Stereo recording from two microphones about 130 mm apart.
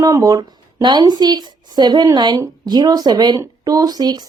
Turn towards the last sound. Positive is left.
turn(degrees=-30)  # may be behind; listen again after turning